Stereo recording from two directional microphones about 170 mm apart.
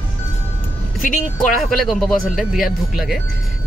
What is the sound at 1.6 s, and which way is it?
Speech, centre (ahead or behind).